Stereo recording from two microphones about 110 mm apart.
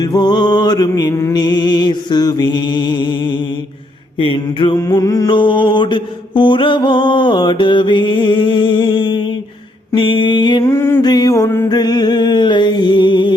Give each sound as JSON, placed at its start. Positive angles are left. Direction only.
{"t": 0.0, "sound": "music", "side_deg": 40}
{"t": 1.3, "sound": "music", "side_deg": 40}
{"t": 4.2, "sound": "mantra", "side_deg": 50}
{"t": 4.8, "sound": "music", "side_deg": 35}
{"t": 5.3, "sound": "mantra", "side_deg": 45}
{"t": 10.6, "sound": "music", "side_deg": 25}
{"t": 11.0, "sound": "music", "side_deg": 40}
{"t": 11.7, "sound": "a sound", "side_deg": 40}